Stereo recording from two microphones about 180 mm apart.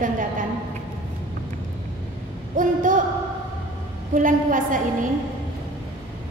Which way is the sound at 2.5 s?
45° right (ahead or behind).